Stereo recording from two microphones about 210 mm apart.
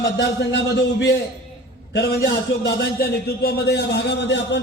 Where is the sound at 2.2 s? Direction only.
45° left (ahead or behind).